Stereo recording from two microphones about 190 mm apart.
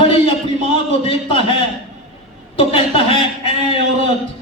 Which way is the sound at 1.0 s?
30° left (ahead or behind).